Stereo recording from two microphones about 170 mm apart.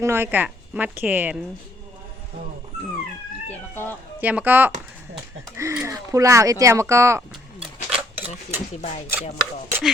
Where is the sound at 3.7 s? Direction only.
10° left (ahead or behind).